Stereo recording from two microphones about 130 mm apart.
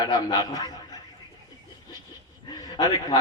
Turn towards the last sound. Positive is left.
turn(degrees=30)  # may be behind; listen again after turning